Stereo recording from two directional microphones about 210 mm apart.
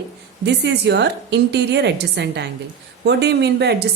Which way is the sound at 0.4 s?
55° right (ahead or behind).